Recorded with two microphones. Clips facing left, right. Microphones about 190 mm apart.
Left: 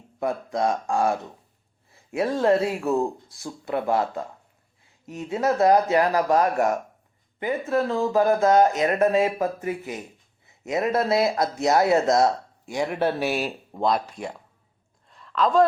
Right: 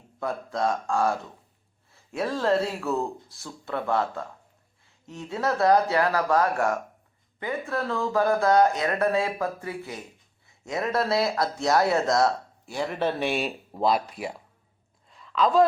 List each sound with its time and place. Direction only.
0.2 s speech: 20° left (ahead or behind)
2.2 s speech: 20° left (ahead or behind); by 14.3 s 5° right (ahead or behind)
15.1 s a sound: centre (ahead or behind)